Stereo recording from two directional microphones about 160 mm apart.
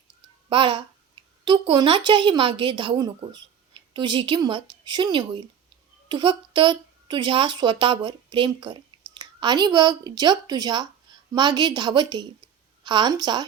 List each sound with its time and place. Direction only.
0.5 s a child's voice: 30° right (ahead or behind)